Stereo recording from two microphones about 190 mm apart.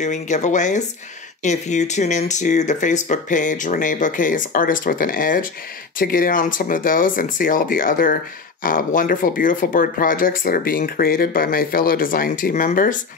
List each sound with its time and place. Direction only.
0.0 s speech: 40° left (ahead or behind)